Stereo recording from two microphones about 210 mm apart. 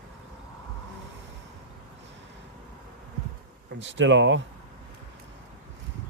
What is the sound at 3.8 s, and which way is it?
Speech, 60° right (ahead or behind).